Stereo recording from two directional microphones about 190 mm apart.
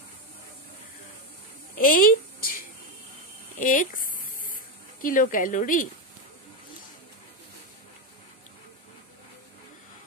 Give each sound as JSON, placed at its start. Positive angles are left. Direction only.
{"t": 1.8, "sound": "a woman's voice", "side_deg": 50}
{"t": 3.5, "sound": "a sound", "side_deg": 45}
{"t": 5.0, "sound": "a woman's voice", "side_deg": 45}